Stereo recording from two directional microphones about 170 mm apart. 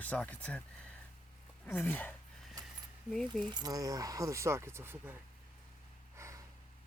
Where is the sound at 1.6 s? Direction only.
10° left (ahead or behind).